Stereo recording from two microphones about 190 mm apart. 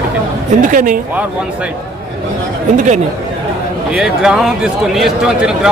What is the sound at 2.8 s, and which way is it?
Speech, 40° right (ahead or behind).